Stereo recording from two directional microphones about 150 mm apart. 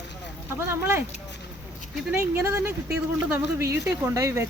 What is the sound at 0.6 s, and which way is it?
Speech, 15° right (ahead or behind).